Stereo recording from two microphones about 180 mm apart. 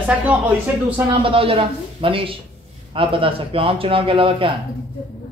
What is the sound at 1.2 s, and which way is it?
A man's voice, 30° right (ahead or behind).